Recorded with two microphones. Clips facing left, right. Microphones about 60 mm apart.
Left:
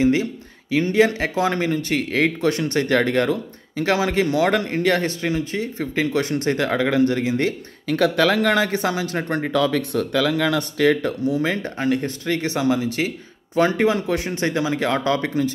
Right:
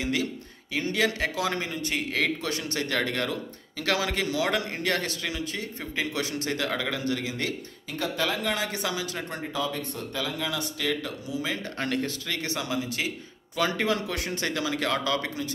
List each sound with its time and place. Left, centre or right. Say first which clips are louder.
0.0 s speech: left 10 dB; left
7.8 s speech: left 12 dB; left
8.7 s speech: left 8 dB; left
11.8 s speech: left 7 dB; centre
12.3 s speech: left 10 dB; left